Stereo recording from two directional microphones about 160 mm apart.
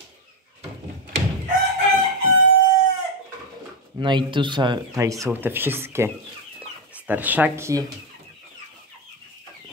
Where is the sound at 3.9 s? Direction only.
30° right (ahead or behind).